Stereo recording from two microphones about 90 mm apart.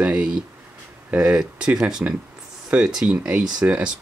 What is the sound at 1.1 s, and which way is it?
Speech, 15° right (ahead or behind).